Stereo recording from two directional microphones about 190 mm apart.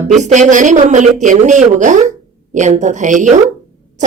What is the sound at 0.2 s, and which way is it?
Speech, 40° right (ahead or behind).